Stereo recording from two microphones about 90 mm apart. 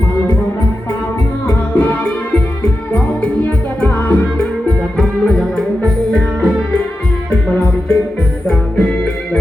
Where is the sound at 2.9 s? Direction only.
15° left (ahead or behind).